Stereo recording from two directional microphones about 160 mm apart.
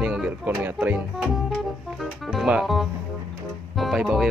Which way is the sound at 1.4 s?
Centre (ahead or behind).